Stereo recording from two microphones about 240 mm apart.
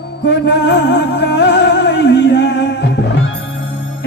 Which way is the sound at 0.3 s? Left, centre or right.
Left.